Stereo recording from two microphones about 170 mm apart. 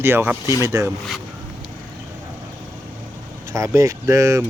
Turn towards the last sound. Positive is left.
turn(degrees=-20)  # may be behind; listen again after turning